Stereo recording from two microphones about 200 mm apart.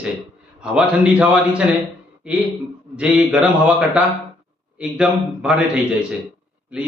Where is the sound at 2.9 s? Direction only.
5° right (ahead or behind).